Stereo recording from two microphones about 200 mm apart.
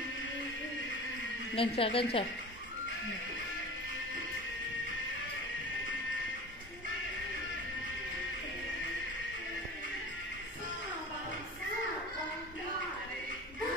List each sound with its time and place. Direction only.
1.5 s a woman's voice: 30° left (ahead or behind)